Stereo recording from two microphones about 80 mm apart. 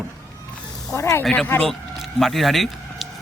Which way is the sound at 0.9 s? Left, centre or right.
Left.